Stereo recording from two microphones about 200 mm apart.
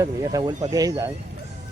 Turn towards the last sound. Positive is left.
turn(degrees=-15)  # may be behind; listen again after turning